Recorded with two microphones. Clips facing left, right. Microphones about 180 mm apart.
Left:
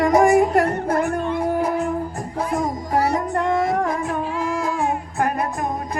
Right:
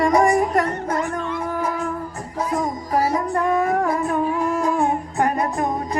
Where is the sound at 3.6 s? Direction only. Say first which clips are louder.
Right 1 dB; 90° left.